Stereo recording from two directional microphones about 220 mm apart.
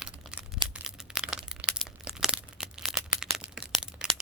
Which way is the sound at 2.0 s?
5° right (ahead or behind).